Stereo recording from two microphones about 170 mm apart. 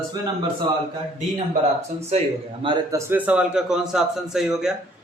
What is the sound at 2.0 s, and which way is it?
Speech, 40° right (ahead or behind).